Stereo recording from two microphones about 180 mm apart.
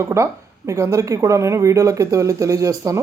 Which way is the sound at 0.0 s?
15° right (ahead or behind).